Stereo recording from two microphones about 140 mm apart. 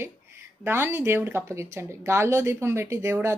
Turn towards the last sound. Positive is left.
turn(degrees=-20)  # may be behind; listen again after turning